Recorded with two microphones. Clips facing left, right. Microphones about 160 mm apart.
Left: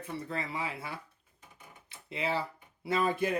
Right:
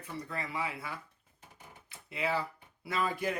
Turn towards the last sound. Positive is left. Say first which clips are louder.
# left 4 dB
turn(degrees=25)  # may be behind; listen again after turning